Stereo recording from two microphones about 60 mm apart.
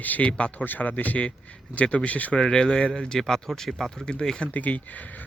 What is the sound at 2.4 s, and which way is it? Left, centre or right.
Speech, centre.